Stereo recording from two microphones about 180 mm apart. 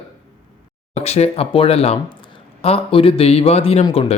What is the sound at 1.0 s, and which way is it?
Speech, 35° left (ahead or behind).